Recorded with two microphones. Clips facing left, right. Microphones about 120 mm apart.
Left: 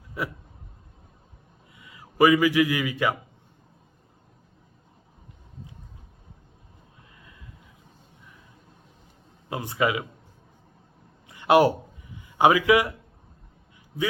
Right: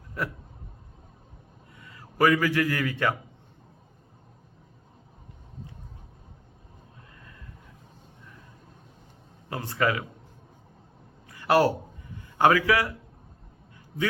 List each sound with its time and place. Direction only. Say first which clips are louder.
1.8 s a man's voice: left 3 dB; 10° left (ahead or behind)
9.5 s speech: left 1 dB; 15° left (ahead or behind)
11.3 s a sound: left 3 dB; 20° left (ahead or behind)
12.4 s speech: left 2 dB; 15° left (ahead or behind)